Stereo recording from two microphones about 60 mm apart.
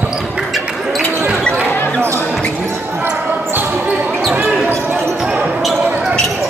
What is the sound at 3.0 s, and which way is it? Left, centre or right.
Basketball bounce, right.